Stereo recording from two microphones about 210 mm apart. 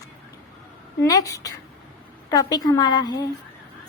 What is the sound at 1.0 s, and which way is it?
A woman's voice, 15° left (ahead or behind).